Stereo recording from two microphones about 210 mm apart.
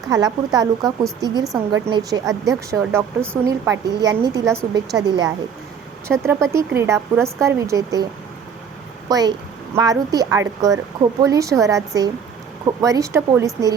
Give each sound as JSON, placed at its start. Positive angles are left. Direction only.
{"t": 0.1, "sound": "a woman's voice", "side_deg": -15}
{"t": 9.0, "sound": "a woman's voice", "side_deg": -15}